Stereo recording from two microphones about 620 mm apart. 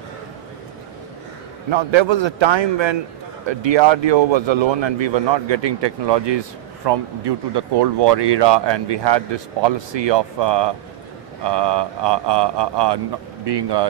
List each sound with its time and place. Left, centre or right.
1.7 s speech: right